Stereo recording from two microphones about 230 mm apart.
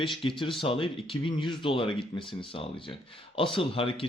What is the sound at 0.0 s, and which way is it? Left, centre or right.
Speech, left.